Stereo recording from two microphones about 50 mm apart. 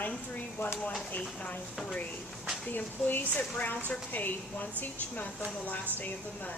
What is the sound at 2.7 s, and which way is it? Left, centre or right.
Speech, left.